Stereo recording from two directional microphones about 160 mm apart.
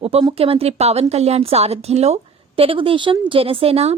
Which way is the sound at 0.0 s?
35° right (ahead or behind).